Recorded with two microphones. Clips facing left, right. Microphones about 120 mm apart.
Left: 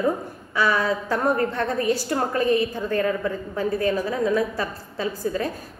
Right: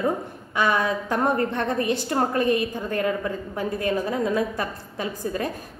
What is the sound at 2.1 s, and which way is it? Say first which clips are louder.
Speech: right 4 dB; 30° right (ahead or behind).